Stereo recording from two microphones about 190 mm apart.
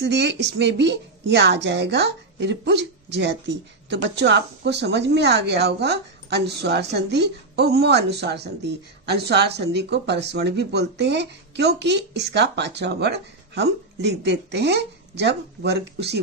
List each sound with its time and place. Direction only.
0.0 s a woman's voice: 65° right (ahead or behind)